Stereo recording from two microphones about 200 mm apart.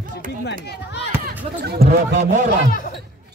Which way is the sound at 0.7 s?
60° left (ahead or behind).